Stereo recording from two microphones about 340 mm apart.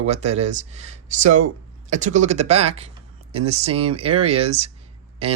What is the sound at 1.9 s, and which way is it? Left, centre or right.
Speech, right.